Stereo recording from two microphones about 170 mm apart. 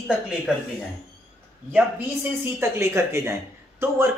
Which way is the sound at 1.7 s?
15° right (ahead or behind).